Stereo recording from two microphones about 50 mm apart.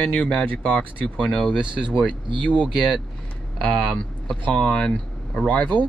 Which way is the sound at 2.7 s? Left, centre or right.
Centre.